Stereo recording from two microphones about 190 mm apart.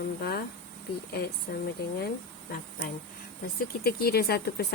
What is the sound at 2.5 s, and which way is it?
Speech, 50° left (ahead or behind).